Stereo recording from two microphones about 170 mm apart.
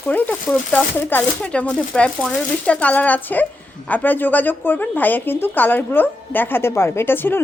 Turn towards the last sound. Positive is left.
turn(degrees=15)  # may be behind; listen again after turning